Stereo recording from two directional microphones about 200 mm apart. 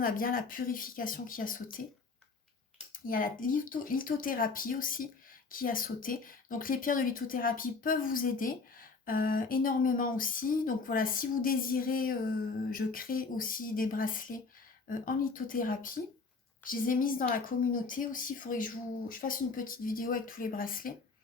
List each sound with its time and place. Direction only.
0.0 s speech: 45° left (ahead or behind)
3.1 s speech: 45° left (ahead or behind)